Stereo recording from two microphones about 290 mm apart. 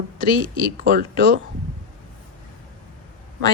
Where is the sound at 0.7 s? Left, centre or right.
Right.